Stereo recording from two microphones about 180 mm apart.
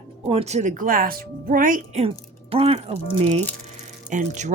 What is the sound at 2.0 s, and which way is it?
Speech, 30° right (ahead or behind).